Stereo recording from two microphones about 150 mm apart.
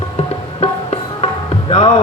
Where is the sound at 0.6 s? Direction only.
40° left (ahead or behind).